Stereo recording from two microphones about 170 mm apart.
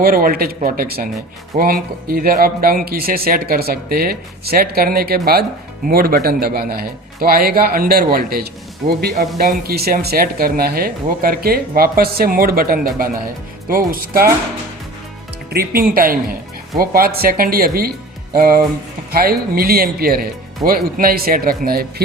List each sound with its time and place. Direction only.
0.0 s speech: 60° right (ahead or behind)
15.4 s speech: 65° right (ahead or behind)